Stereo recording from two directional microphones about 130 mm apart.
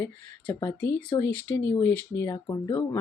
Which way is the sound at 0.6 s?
35° left (ahead or behind).